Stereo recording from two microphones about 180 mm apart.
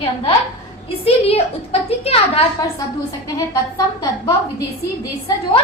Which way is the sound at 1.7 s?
35° left (ahead or behind).